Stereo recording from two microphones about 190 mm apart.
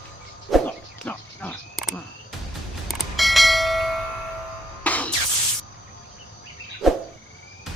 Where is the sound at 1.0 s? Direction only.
5° left (ahead or behind).